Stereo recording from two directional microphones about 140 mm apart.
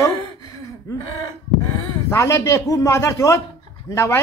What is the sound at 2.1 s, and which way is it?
A woman's voice, 20° left (ahead or behind).